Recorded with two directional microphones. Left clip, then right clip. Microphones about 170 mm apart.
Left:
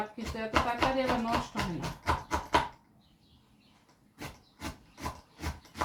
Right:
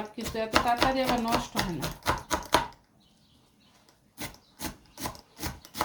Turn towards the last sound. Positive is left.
turn(degrees=-35)  # may be behind; listen again after turning